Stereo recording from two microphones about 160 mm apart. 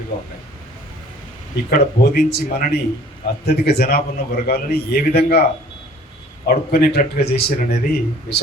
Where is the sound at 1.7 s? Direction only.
70° left (ahead or behind).